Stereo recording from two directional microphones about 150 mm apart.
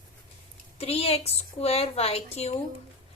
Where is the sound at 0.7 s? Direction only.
40° left (ahead or behind).